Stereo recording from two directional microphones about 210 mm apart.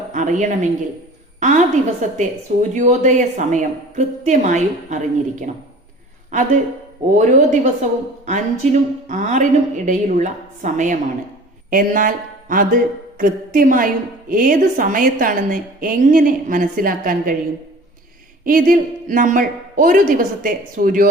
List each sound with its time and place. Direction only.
0.1 s a woman's voice: 35° right (ahead or behind)
7.2 s a woman's voice: 35° right (ahead or behind)
18.4 s a woman's voice: 40° right (ahead or behind)